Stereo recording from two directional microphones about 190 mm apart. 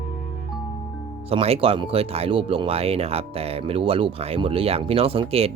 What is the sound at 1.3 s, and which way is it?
Speech, 30° right (ahead or behind).